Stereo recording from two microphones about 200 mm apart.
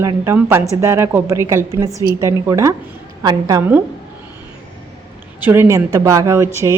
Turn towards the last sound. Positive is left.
turn(degrees=-15)  # may be behind; listen again after turning